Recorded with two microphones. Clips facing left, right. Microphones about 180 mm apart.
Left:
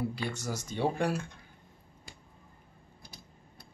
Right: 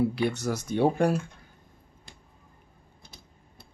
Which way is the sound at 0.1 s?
65° right (ahead or behind).